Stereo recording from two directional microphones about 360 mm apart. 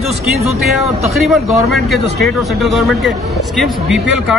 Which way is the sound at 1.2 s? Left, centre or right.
Centre.